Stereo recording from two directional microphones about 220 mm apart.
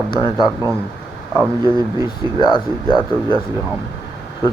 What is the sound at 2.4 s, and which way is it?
Speech, 20° left (ahead or behind).